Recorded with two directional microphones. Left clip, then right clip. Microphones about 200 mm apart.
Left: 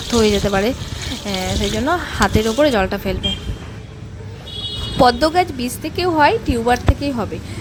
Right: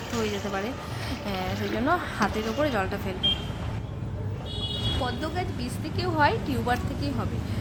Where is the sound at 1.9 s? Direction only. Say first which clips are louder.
Left 7 dB; 30° left (ahead or behind).